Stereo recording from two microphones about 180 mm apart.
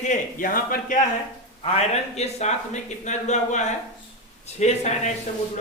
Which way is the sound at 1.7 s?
35° left (ahead or behind).